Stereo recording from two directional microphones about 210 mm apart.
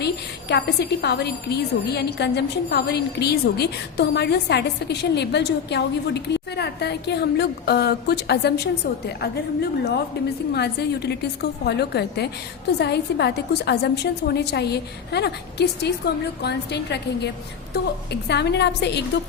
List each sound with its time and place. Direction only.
0.0 s a woman's voice: 55° left (ahead or behind)